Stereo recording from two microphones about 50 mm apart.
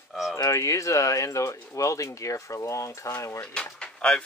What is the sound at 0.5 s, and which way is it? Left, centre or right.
Speech, left.